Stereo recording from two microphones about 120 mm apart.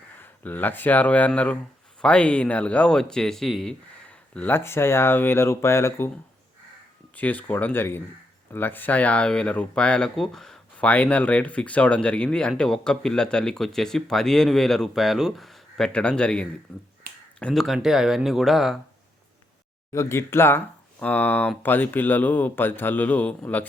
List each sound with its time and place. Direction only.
0.2 s speech: 15° left (ahead or behind)
4.4 s speech: 15° left (ahead or behind)
7.2 s speech: 15° left (ahead or behind)
19.9 s speech: 20° left (ahead or behind)